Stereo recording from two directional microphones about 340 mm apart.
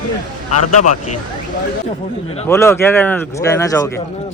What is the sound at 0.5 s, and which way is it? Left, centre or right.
Speech, left.